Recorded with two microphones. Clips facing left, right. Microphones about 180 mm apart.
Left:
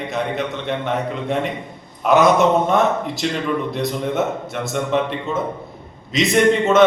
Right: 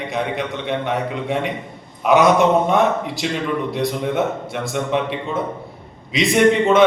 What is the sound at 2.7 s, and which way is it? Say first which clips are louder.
Speech: even; 5° right (ahead or behind).